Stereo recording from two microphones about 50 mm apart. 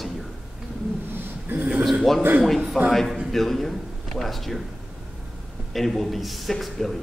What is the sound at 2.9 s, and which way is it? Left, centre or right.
Speech, centre.